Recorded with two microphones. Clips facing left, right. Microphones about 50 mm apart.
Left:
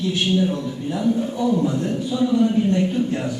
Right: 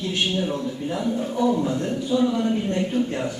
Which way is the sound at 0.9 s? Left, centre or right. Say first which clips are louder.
Left 5 dB; right.